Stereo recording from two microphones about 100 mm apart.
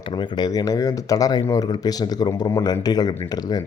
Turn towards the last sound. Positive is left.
turn(degrees=40)  # may be behind; listen again after turning